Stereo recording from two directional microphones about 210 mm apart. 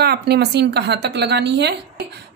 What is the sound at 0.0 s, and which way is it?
A woman's voice, 50° right (ahead or behind).